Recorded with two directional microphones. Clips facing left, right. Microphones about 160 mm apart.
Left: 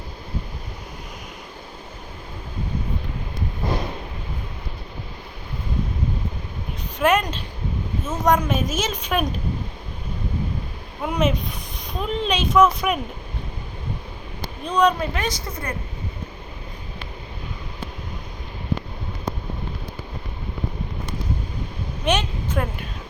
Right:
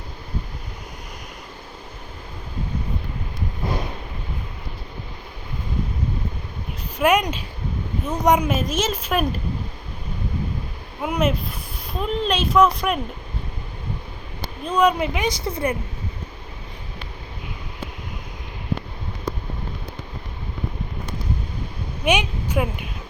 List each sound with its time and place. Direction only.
7.0 s speech: 10° right (ahead or behind)
8.4 s speech: centre (ahead or behind)
11.0 s speech: 5° right (ahead or behind)
14.6 s speech: 5° right (ahead or behind)
22.0 s speech: 10° right (ahead or behind)